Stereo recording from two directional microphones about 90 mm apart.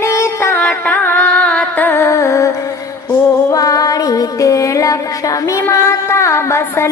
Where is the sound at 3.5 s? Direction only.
40° left (ahead or behind).